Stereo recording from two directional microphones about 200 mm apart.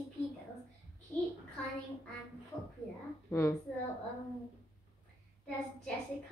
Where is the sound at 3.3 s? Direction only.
15° left (ahead or behind).